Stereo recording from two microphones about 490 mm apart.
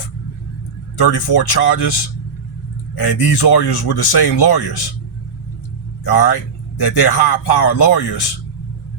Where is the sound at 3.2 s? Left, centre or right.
Left.